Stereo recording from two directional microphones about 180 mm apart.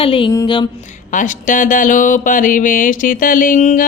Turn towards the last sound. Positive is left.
turn(degrees=45)  # may be behind; listen again after turning